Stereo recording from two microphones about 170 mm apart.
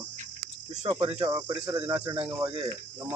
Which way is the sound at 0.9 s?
30° right (ahead or behind).